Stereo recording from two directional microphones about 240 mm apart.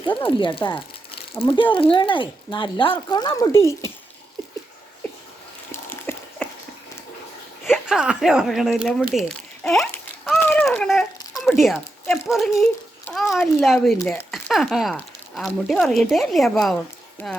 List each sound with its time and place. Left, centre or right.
0.0 s speech: centre
5.7 s a sound: centre
7.6 s speech: centre
9.1 s crumpling: centre
11.6 s speech: centre